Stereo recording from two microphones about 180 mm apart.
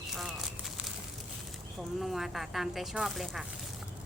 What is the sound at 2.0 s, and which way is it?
Speech, centre (ahead or behind).